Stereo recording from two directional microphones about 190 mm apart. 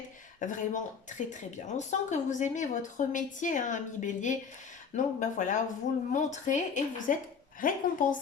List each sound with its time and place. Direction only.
0.3 s a woman's voice: 40° left (ahead or behind)